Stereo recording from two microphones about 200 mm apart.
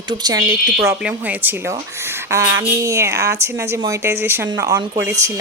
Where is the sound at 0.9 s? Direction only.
10° right (ahead or behind).